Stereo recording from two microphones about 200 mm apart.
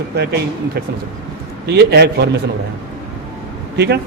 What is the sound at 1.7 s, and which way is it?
Speech, 60° right (ahead or behind).